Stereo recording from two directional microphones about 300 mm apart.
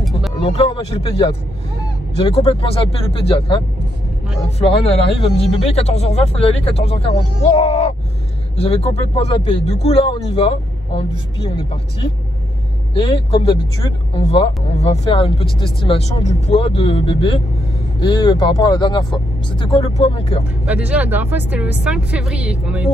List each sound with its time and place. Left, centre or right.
0.4 s speech: centre
7.5 s a sound: left
8.5 s speech: centre
20.6 s speech: centre